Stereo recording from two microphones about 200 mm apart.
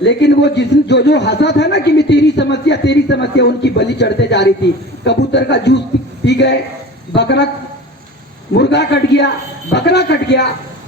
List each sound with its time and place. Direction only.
0.0 s a man's voice: 60° left (ahead or behind)
8.5 s a man's voice: 60° left (ahead or behind)